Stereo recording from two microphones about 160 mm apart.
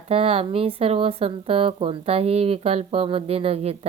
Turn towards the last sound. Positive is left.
turn(degrees=-40)  # may be behind; listen again after turning